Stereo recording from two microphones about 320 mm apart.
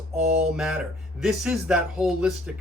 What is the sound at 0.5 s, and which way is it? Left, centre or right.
Speech, centre.